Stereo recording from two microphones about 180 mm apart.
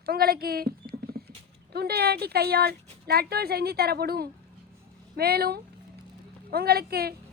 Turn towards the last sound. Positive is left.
turn(degrees=-60)  # may be behind; listen again after turning